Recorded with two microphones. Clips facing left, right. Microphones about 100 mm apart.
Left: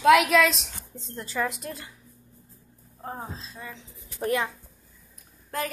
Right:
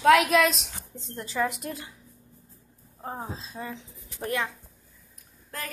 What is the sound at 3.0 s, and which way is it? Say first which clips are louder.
Speech: right 1 dB; 10° right (ahead or behind).